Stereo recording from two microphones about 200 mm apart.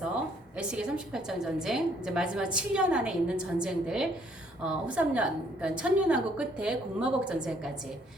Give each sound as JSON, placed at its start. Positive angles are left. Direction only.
{"t": 0.5, "sound": "a woman's voice", "side_deg": -5}